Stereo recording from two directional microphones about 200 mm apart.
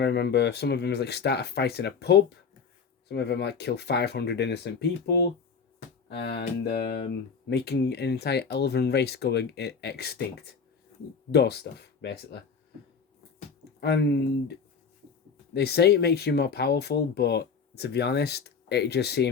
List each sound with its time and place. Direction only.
0.0 s speech: 55° left (ahead or behind)
13.8 s speech: 55° left (ahead or behind)
15.5 s speech: 55° left (ahead or behind)